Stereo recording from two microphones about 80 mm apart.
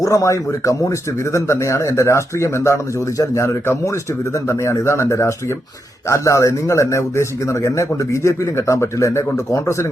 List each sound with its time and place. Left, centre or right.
0.0 s speech: left